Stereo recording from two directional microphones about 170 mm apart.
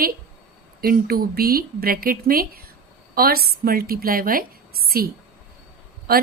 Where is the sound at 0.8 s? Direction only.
60° right (ahead or behind).